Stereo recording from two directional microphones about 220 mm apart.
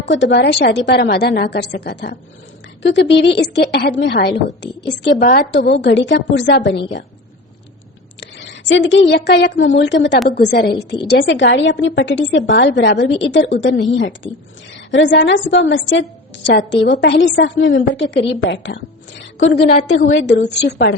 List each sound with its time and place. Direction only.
0.0 s a woman's voice: 55° left (ahead or behind)
5.8 s a woman's voice: 55° left (ahead or behind)
8.2 s a woman's voice: 55° left (ahead or behind)